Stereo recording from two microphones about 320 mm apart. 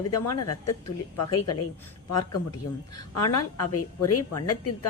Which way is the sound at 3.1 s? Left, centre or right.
Left.